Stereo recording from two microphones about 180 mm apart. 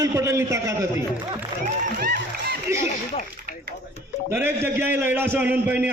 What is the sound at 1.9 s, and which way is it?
Speech, 55° right (ahead or behind).